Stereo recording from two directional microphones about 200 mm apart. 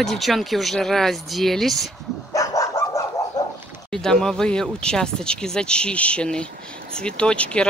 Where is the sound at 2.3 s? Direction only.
15° left (ahead or behind).